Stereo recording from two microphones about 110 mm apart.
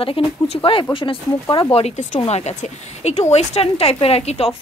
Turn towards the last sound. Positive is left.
turn(degrees=70)  # may be behind; listen again after turning